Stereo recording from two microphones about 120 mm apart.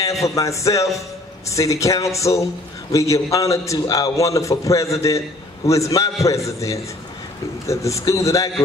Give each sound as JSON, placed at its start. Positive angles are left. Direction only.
{"t": 0.0, "sound": "a man's voice", "side_deg": 25}